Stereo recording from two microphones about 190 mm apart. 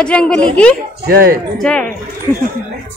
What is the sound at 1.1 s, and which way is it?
Speech, 50° right (ahead or behind).